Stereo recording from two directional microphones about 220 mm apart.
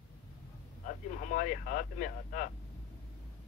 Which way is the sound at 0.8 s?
35° left (ahead or behind).